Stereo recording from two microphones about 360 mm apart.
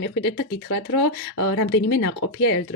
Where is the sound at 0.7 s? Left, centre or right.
Left.